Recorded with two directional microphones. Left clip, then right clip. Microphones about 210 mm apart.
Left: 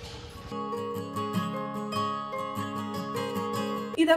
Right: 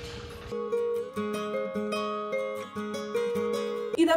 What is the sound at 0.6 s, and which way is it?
Music, 55° left (ahead or behind).